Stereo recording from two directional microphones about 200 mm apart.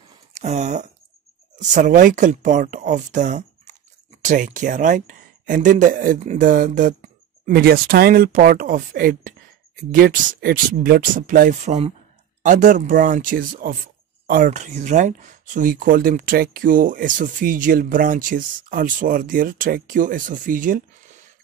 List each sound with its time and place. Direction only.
0.3 s speech: 35° right (ahead or behind)